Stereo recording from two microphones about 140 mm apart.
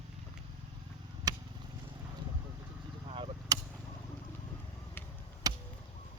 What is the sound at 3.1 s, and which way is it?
Chop, 40° right (ahead or behind).